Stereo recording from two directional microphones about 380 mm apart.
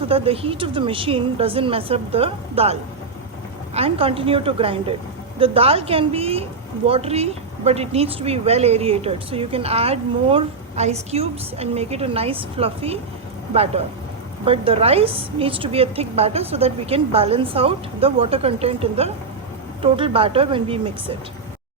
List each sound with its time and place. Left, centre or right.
0.0 s speech: centre
3.8 s speech: centre